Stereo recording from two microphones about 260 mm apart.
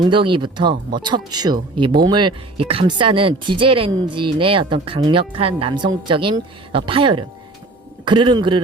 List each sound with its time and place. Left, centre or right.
0.0 s speech: centre